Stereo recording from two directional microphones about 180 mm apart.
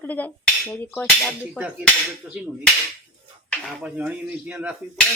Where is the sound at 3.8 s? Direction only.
5° right (ahead or behind).